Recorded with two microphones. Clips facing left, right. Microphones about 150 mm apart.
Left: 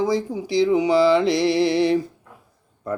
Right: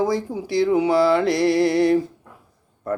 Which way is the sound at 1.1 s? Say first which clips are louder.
Even; 55° right (ahead or behind).